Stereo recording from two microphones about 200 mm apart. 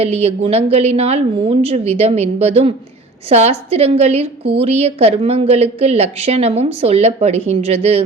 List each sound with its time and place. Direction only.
0.0 s a woman's voice: 30° right (ahead or behind)